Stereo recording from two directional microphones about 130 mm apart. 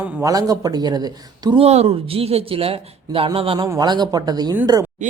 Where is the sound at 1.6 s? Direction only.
55° right (ahead or behind).